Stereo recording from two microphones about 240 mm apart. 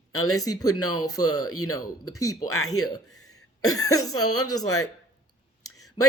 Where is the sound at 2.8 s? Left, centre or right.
Left.